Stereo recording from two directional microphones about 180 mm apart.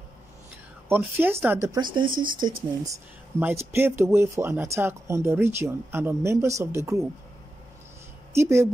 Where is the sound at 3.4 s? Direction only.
15° right (ahead or behind).